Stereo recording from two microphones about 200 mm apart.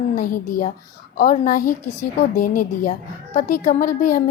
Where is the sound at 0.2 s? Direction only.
40° left (ahead or behind).